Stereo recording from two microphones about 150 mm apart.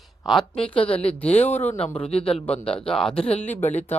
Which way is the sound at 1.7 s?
40° left (ahead or behind).